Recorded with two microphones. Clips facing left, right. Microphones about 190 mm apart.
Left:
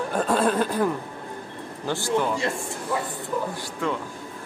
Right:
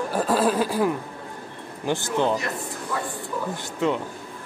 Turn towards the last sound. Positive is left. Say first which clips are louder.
# right 4 dB
turn(degrees=-20)  # may be behind; listen again after turning